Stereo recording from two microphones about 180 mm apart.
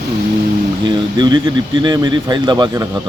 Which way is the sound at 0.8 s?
25° right (ahead or behind).